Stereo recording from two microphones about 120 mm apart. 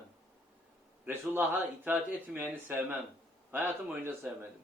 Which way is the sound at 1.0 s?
15° right (ahead or behind).